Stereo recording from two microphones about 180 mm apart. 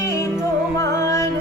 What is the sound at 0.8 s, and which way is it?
Music, 15° left (ahead or behind).